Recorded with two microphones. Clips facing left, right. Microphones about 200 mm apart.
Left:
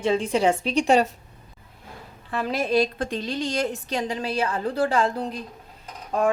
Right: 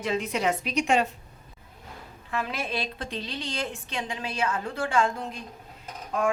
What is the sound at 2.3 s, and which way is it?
A woman's voice, 35° left (ahead or behind).